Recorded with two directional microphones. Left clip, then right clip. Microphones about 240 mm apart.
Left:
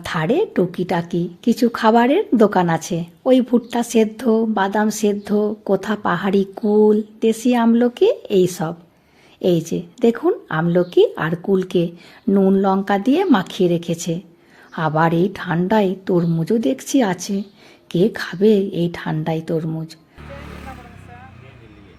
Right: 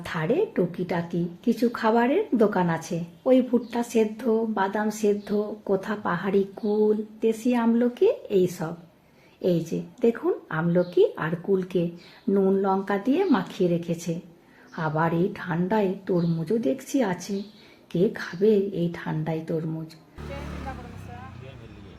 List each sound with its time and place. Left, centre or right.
0.0 s speech: left